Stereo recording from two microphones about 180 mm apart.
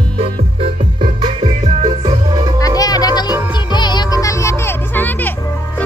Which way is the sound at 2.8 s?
20° left (ahead or behind).